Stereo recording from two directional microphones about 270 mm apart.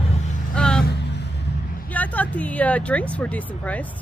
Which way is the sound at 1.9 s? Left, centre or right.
Centre.